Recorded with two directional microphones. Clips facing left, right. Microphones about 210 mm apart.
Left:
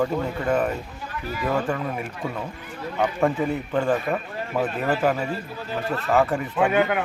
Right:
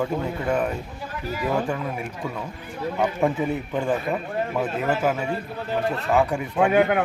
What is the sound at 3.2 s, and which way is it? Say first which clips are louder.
A man's voice: even; 15° right (ahead or behind).